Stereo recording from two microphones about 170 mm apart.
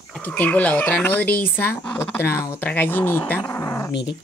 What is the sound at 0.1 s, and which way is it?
Speech, 5° left (ahead or behind).